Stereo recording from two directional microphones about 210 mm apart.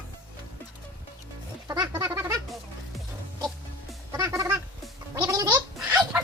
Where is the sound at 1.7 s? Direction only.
15° right (ahead or behind).